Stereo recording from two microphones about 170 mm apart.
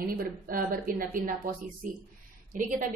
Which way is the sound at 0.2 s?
55° right (ahead or behind).